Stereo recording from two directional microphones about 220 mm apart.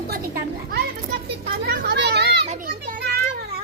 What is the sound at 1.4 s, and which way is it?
Children playing, 45° right (ahead or behind).